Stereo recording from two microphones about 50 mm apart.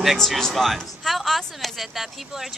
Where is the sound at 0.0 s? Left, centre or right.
Centre.